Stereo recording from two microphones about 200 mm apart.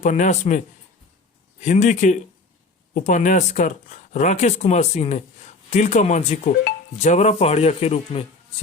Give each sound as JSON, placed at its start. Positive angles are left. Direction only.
{"t": 0.0, "sound": "speech", "side_deg": 35}
{"t": 1.6, "sound": "speech", "side_deg": 35}